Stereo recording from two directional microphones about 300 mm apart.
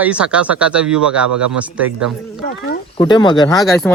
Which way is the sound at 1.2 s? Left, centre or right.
Right.